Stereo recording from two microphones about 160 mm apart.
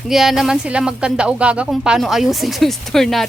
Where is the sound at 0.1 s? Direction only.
Centre (ahead or behind).